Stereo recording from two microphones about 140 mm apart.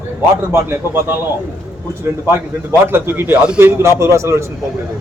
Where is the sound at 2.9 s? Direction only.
15° right (ahead or behind).